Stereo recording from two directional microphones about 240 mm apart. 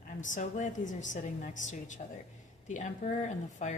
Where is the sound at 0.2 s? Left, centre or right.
Left.